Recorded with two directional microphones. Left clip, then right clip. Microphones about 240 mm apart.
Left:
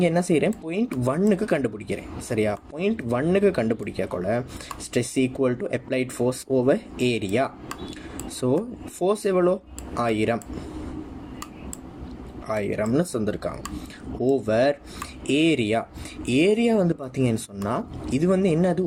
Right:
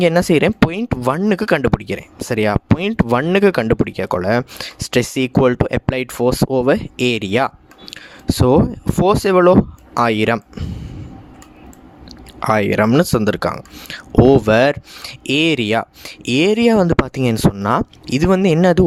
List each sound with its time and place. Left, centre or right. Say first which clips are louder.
0.0 s speech: right 8 dB; right
9.0 s speech: right 9 dB; right
12.4 s speech: right 11 dB; right